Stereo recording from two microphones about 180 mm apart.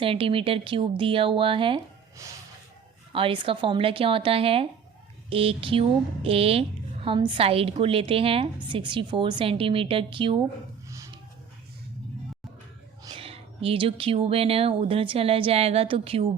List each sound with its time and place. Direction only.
0.0 s speech: 30° right (ahead or behind)
2.2 s music: 15° right (ahead or behind)
3.1 s speech: 30° right (ahead or behind)
10.8 s a sound: 15° right (ahead or behind)
13.1 s speech: 30° right (ahead or behind)